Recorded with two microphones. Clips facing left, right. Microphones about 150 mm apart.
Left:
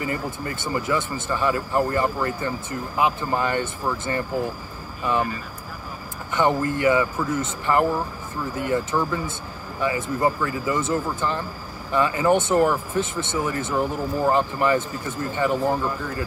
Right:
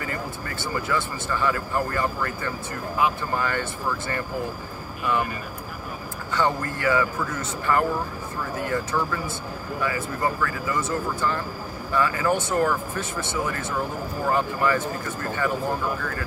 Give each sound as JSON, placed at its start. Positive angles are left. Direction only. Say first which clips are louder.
{"t": 0.0, "sound": "speech", "louder": "left 4 dB", "side_deg": 20}
{"t": 6.3, "sound": "speech", "louder": "left 4 dB", "side_deg": 20}